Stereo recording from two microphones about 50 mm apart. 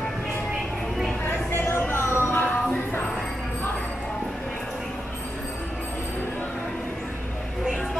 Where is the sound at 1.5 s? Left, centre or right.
Left.